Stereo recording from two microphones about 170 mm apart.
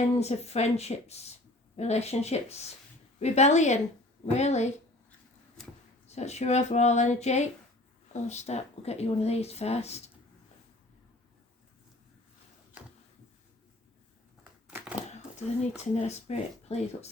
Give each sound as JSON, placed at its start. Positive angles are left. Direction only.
{"t": 0.2, "sound": "a woman's voice", "side_deg": 40}
{"t": 5.6, "sound": "a sound", "side_deg": 5}
{"t": 6.1, "sound": "speech", "side_deg": 40}
{"t": 14.7, "sound": "crushing", "side_deg": -10}
{"t": 15.7, "sound": "speech", "side_deg": 40}